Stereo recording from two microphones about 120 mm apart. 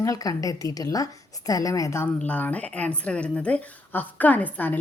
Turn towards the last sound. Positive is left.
turn(degrees=15)  # may be behind; listen again after turning